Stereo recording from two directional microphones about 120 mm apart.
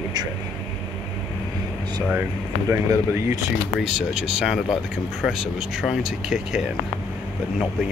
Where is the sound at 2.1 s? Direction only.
20° right (ahead or behind).